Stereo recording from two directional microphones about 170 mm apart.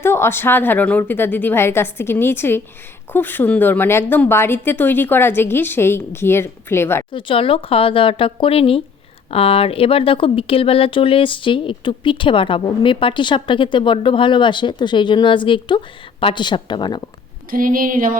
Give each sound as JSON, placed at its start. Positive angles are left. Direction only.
{"t": 0.0, "sound": "a woman's voice", "side_deg": 15}
{"t": 7.1, "sound": "speech", "side_deg": 30}
{"t": 17.5, "sound": "speech", "side_deg": -55}